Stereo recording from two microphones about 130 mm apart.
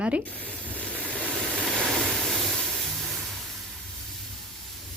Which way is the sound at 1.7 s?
Centre (ahead or behind).